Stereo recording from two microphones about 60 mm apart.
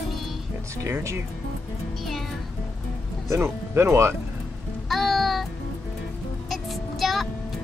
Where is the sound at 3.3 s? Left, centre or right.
Right.